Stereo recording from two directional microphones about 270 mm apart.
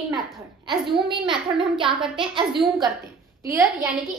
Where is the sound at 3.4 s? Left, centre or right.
Centre.